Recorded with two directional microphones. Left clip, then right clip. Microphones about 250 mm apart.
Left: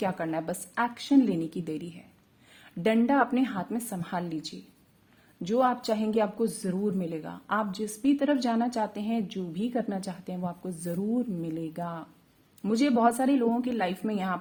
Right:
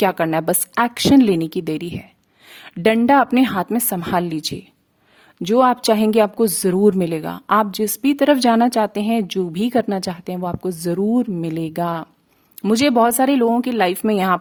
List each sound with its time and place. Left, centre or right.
0.0 s a woman's voice: right